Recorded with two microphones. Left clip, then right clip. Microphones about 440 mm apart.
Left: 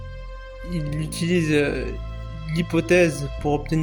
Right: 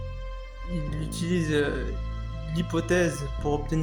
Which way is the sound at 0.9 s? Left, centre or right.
Right.